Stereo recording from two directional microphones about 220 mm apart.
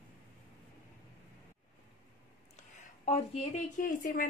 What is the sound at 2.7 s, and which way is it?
A woman's voice, 30° left (ahead or behind).